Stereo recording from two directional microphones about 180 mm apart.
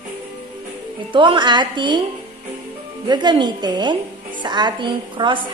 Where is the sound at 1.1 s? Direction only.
25° right (ahead or behind).